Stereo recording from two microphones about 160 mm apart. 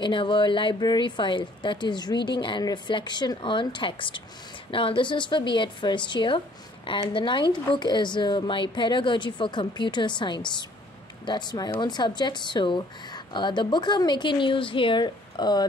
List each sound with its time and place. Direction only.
0.0 s a woman's voice: 30° left (ahead or behind)